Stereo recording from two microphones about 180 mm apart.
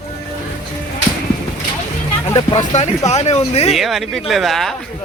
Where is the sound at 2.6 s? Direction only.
40° left (ahead or behind).